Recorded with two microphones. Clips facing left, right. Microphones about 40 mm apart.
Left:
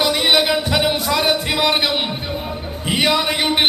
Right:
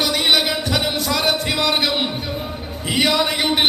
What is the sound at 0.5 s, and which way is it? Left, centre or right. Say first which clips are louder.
Music: left 3 dB; left.